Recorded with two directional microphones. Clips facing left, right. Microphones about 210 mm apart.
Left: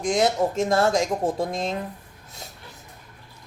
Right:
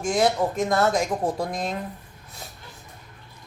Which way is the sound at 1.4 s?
25° left (ahead or behind).